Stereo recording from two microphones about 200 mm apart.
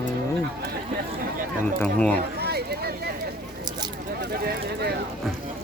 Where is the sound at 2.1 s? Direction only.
55° right (ahead or behind).